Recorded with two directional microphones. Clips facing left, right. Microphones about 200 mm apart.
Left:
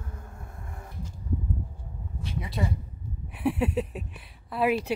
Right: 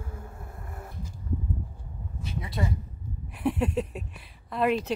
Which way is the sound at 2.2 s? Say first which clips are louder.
Even; centre (ahead or behind).